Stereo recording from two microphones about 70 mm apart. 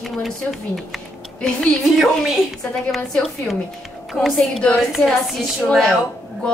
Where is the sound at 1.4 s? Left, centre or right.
Centre.